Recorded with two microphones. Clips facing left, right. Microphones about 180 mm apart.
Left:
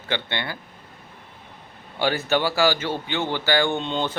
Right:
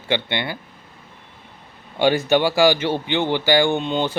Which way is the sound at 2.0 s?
15° right (ahead or behind).